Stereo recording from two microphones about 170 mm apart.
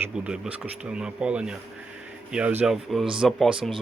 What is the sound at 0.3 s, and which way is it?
Speech, 5° right (ahead or behind).